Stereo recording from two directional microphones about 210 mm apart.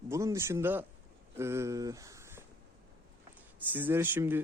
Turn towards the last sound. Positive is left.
turn(degrees=-10)  # may be behind; listen again after turning